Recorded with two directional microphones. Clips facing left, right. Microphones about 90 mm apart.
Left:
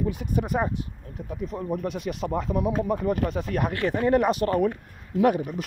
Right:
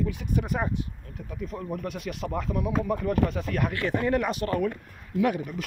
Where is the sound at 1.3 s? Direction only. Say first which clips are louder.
Left 4 dB; 25° left (ahead or behind).